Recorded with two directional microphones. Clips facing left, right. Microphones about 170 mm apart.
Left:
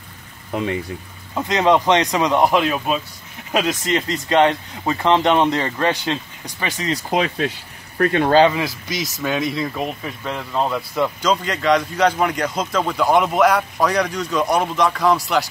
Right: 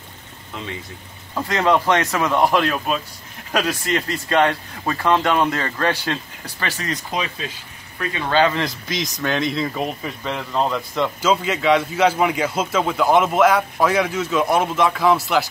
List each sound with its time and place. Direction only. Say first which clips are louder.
0.5 s speech: left 9 dB; 55° left (ahead or behind)
1.3 s a man's voice: left 2 dB; 20° left (ahead or behind)
3.6 s speech: left 2 dB; 20° left (ahead or behind)
7.1 s speech: left 6 dB; 60° left (ahead or behind)
8.5 s speech: left 2 dB; 5° left (ahead or behind)